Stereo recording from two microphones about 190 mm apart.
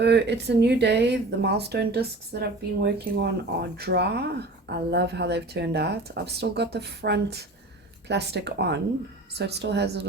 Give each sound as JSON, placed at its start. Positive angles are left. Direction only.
{"t": 0.0, "sound": "speech", "side_deg": -60}